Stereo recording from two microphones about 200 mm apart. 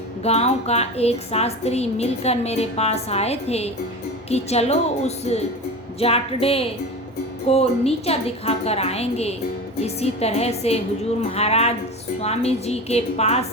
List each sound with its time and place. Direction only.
0.2 s a woman's voice: 30° left (ahead or behind)